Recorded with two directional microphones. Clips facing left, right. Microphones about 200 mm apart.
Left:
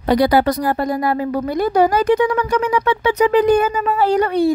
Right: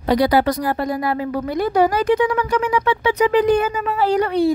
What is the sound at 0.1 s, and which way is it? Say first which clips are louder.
A woman's voice: left 2 dB; 50° left (ahead or behind).